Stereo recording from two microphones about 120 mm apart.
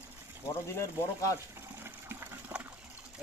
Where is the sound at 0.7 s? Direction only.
25° left (ahead or behind).